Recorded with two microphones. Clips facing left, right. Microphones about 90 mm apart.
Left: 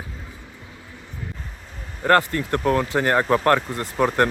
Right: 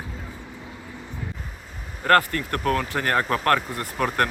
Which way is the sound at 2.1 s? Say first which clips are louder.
Left 1 dB; 20° left (ahead or behind).